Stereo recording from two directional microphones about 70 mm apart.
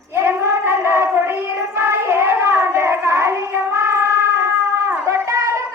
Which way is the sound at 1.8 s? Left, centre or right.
Right.